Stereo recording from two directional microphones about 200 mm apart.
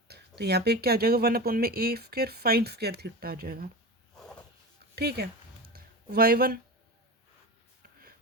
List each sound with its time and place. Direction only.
0.1 s speech: 55° right (ahead or behind)
4.9 s speech: 50° right (ahead or behind)
5.7 s a sound: 50° right (ahead or behind)